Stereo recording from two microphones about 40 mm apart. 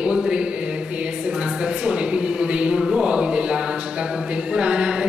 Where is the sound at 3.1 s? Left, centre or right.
Right.